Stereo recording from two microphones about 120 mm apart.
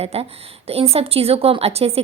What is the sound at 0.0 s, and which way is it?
A woman's voice, 60° right (ahead or behind).